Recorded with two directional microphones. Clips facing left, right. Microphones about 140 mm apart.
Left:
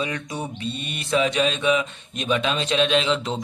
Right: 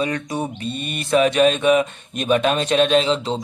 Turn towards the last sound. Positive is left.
turn(degrees=-35)  # may be behind; listen again after turning